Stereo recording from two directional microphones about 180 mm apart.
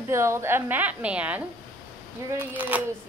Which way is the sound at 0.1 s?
15° right (ahead or behind).